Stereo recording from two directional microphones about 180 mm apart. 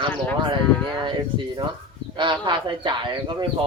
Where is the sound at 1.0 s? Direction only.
25° right (ahead or behind).